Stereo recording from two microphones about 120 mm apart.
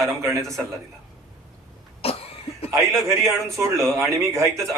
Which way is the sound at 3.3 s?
5° left (ahead or behind).